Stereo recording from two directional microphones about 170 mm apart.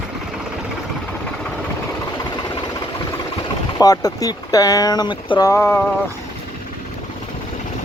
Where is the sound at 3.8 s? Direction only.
20° left (ahead or behind).